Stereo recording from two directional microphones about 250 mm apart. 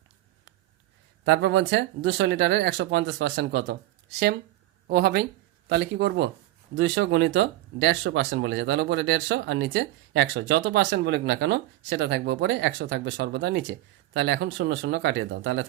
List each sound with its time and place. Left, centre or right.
1.2 s speech: right
4.9 s speech: right